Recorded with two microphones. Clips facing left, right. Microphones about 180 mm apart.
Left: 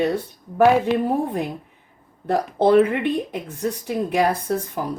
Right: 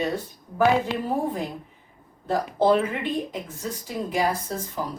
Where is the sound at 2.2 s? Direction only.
65° left (ahead or behind).